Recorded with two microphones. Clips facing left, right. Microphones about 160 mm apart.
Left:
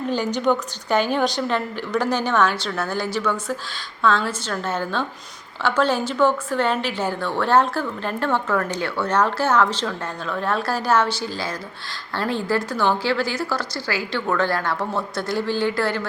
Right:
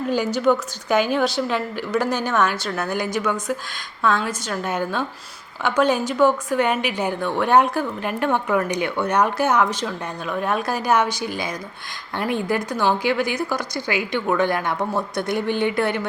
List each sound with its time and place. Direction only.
0.1 s a woman's voice: 10° right (ahead or behind)